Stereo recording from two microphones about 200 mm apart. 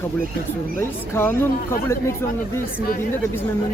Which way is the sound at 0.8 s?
10° left (ahead or behind).